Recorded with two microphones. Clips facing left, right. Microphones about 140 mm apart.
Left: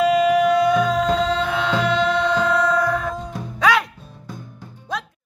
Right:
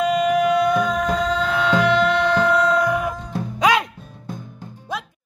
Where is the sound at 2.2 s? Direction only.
15° right (ahead or behind).